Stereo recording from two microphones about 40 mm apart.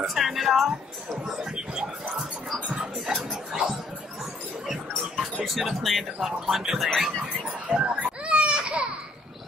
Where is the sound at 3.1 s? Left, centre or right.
Centre.